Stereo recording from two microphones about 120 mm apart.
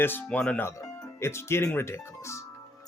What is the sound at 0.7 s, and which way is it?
Speech, 25° left (ahead or behind).